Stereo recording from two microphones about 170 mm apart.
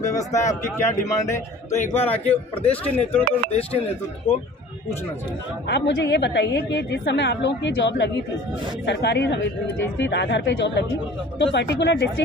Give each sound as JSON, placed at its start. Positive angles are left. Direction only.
{"t": 0.0, "sound": "a man's voice", "side_deg": 20}
{"t": 5.7, "sound": "a woman's voice", "side_deg": 90}